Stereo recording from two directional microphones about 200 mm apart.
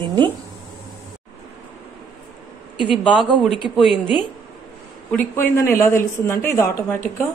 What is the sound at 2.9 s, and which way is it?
A woman's voice, centre (ahead or behind).